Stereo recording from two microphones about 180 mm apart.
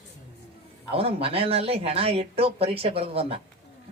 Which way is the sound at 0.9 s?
35° right (ahead or behind).